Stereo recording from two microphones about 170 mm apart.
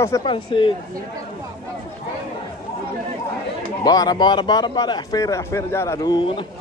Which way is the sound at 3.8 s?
20° left (ahead or behind).